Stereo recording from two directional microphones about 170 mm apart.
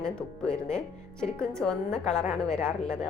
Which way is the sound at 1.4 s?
5° left (ahead or behind).